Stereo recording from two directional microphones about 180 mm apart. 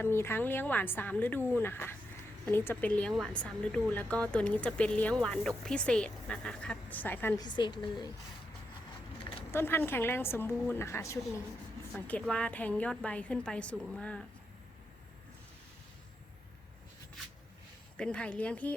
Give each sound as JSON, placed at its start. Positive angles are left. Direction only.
{"t": 0.0, "sound": "speech", "side_deg": 15}
{"t": 7.4, "sound": "a woman's voice", "side_deg": 25}
{"t": 9.5, "sound": "speech", "side_deg": 15}
{"t": 17.9, "sound": "speech", "side_deg": 5}